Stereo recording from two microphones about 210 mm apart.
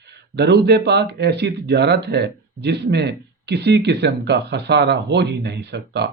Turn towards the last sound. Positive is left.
turn(degrees=-50)  # may be behind; listen again after turning